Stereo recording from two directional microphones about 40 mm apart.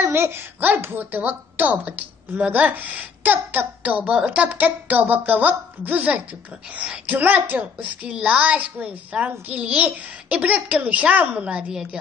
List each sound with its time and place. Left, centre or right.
0.0 s a child's voice: right
11.7 s a woman's voice: centre